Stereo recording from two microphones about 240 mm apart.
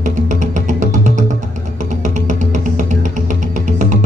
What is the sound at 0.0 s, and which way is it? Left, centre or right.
Music, right.